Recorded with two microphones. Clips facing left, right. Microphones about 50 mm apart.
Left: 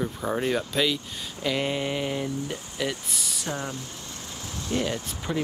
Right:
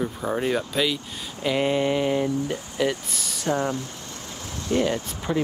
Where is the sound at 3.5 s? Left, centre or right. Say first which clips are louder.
Right 9 dB; right.